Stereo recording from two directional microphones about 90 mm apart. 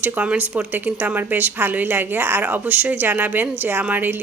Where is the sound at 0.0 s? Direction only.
20° right (ahead or behind).